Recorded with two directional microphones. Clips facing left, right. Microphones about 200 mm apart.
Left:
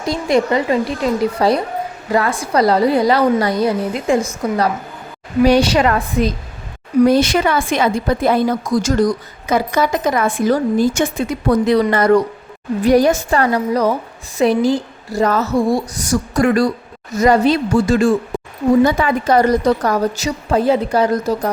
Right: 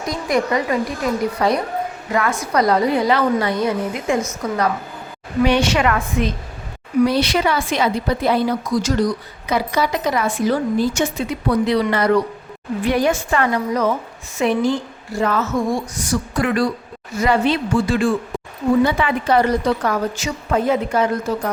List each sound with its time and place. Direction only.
0.0 s a woman's voice: 30° left (ahead or behind)
7.0 s a woman's voice: 45° left (ahead or behind)